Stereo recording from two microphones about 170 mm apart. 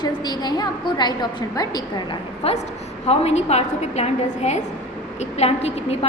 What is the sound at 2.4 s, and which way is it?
A woman's voice, 35° left (ahead or behind).